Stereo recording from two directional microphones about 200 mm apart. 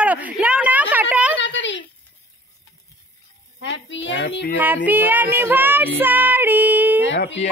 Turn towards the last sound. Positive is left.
turn(degrees=65)  # may be behind; listen again after turning